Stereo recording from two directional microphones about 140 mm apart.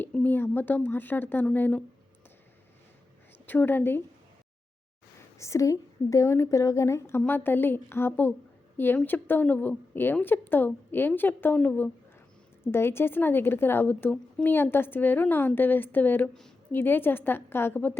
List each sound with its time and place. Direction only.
0.0 s a woman's voice: 10° left (ahead or behind)
3.4 s a woman's voice: 15° left (ahead or behind)
5.4 s a woman's voice: 20° left (ahead or behind)